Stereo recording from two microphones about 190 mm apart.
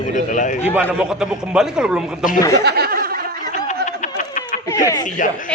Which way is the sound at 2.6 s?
55° right (ahead or behind).